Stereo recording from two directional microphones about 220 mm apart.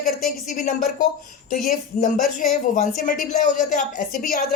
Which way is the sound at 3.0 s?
35° left (ahead or behind).